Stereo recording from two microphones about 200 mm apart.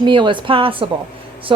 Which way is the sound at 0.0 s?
25° right (ahead or behind).